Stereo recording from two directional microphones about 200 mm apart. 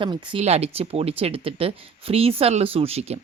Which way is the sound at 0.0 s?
25° right (ahead or behind).